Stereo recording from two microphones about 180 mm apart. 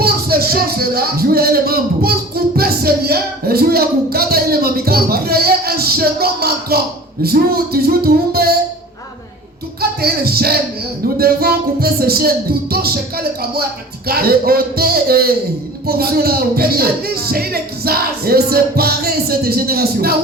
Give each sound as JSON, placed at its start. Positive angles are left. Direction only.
{"t": 0.0, "sound": "speech", "side_deg": -60}
{"t": 7.2, "sound": "music", "side_deg": -55}
{"t": 10.0, "sound": "music", "side_deg": -60}